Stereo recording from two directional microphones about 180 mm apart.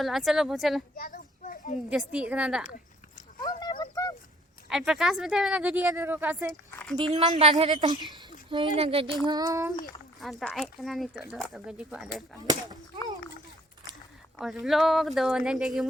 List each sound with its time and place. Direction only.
0.0 s speech: centre (ahead or behind)
0.9 s children playing: 50° left (ahead or behind)
1.9 s speech: 5° right (ahead or behind)
3.4 s a sound: 25° left (ahead or behind)
4.9 s speech: 5° right (ahead or behind)
6.9 s child singing: 25° right (ahead or behind)
8.1 s speech: 25° right (ahead or behind)
9.2 s child singing: 20° right (ahead or behind)
10.2 s speech: centre (ahead or behind)
14.3 s speech: centre (ahead or behind)